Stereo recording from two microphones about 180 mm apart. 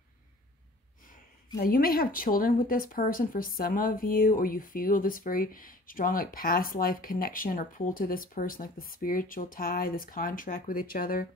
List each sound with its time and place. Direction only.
1.6 s speech: 55° left (ahead or behind)